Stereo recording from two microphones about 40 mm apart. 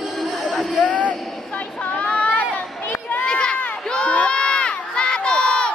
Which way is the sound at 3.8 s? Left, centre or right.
Left.